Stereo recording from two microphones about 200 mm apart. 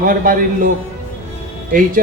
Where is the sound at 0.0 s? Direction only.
45° right (ahead or behind).